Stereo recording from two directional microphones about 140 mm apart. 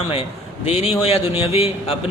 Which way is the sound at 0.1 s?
45° left (ahead or behind).